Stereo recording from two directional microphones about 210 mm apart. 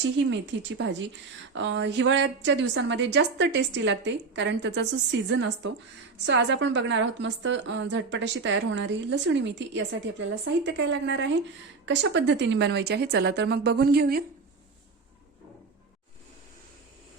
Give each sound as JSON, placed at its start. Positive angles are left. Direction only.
{"t": 0.3, "sound": "a woman's voice", "side_deg": -60}